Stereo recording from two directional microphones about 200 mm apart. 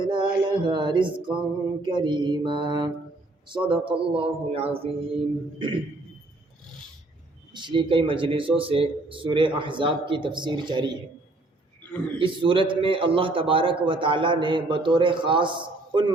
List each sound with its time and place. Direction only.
0.0 s a man's voice: 25° right (ahead or behind)
7.5 s a man's voice: 25° right (ahead or behind)
12.2 s a man's voice: 25° right (ahead or behind)